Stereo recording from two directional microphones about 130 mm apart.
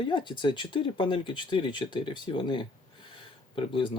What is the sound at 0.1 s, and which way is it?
Speech, 40° left (ahead or behind).